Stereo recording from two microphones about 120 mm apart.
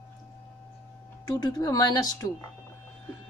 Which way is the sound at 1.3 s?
30° left (ahead or behind).